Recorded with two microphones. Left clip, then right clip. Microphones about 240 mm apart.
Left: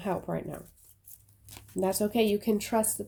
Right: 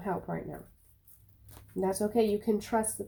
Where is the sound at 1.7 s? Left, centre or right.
Left.